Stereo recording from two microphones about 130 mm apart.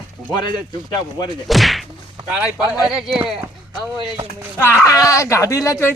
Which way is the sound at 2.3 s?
10° right (ahead or behind).